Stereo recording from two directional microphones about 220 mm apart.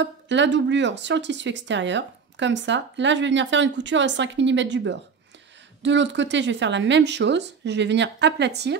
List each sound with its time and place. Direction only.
0.0 s speech: 55° right (ahead or behind)